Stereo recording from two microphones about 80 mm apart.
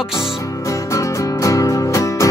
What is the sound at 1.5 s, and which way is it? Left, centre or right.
Music, left.